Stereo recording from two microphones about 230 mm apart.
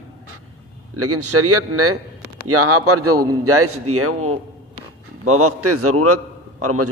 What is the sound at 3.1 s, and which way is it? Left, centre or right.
Speech, centre.